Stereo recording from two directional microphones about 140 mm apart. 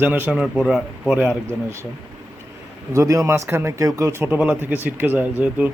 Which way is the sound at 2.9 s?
25° right (ahead or behind).